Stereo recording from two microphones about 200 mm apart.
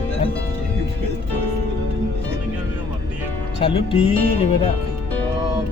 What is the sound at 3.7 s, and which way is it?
Speech, 25° left (ahead or behind).